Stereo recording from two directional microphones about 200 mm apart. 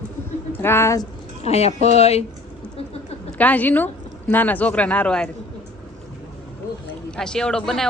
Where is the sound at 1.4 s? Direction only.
30° left (ahead or behind).